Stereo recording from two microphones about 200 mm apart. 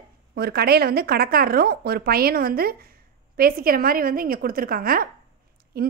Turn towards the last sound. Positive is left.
turn(degrees=-50)  # may be behind; listen again after turning